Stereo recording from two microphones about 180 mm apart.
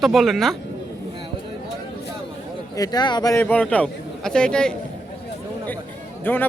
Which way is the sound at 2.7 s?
20° left (ahead or behind).